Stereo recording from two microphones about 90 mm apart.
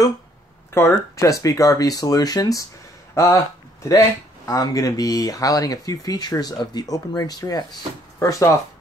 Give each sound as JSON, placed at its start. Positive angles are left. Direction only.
{"t": 0.7, "sound": "speech", "side_deg": 30}
{"t": 4.5, "sound": "speech", "side_deg": 40}
{"t": 8.2, "sound": "speech", "side_deg": 35}